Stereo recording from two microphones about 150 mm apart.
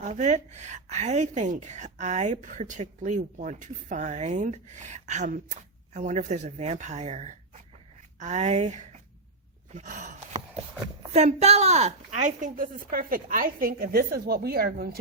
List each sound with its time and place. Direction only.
0.0 s a woman's voice: 50° right (ahead or behind)
9.7 s sigh: 55° right (ahead or behind)
11.1 s a woman's voice: 45° right (ahead or behind); by 14.8 s 90° right